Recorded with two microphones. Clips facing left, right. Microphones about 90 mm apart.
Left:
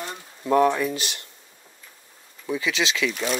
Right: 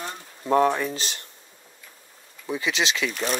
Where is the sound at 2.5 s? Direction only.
25° right (ahead or behind).